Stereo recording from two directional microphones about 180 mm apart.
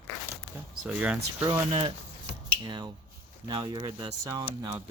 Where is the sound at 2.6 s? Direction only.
25° right (ahead or behind).